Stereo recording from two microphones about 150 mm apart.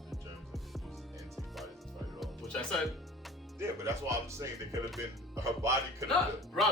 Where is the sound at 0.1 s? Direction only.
Centre (ahead or behind).